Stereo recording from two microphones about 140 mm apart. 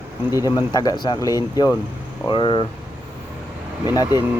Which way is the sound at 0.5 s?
25° left (ahead or behind).